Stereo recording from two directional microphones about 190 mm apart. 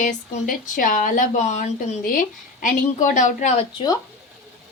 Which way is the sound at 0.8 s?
45° left (ahead or behind).